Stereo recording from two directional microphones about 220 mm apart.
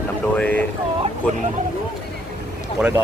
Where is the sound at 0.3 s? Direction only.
5° left (ahead or behind).